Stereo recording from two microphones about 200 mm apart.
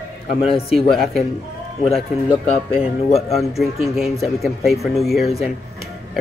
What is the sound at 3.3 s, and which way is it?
Speech, centre (ahead or behind).